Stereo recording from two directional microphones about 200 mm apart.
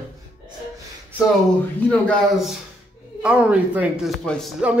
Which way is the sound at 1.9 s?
5° left (ahead or behind).